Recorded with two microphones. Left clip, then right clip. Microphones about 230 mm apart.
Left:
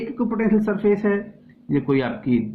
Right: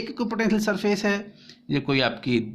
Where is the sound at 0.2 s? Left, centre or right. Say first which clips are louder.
Left 3 dB; right.